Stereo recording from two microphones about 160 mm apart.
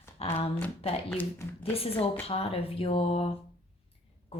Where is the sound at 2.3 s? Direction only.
35° left (ahead or behind).